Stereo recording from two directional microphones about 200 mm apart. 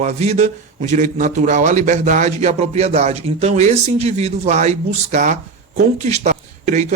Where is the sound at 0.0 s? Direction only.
35° right (ahead or behind).